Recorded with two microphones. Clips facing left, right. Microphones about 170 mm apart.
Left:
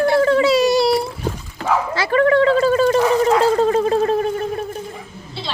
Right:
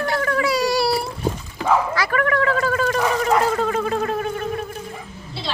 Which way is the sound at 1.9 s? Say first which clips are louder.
Left 6 dB; 25° left (ahead or behind).